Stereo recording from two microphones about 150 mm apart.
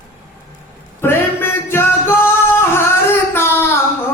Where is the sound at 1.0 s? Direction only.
15° left (ahead or behind).